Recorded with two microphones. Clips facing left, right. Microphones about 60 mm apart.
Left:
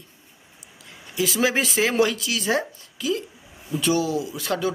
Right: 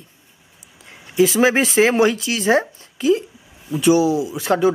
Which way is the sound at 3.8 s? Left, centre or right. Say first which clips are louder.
Right 8 dB; centre.